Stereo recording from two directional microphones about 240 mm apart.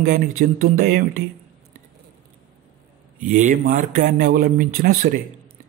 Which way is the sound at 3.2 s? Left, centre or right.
Right.